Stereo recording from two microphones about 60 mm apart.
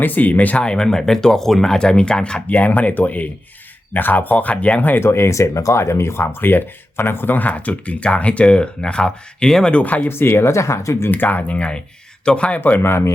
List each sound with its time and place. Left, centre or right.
0.0 s speech: left
5.0 s speech: left; by 9.8 s centre
9.8 s speech: left
10.1 s speech: left
11.1 s speech: left
12.8 s speech: left